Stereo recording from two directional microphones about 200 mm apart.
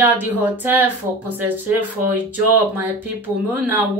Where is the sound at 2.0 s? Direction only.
45° right (ahead or behind).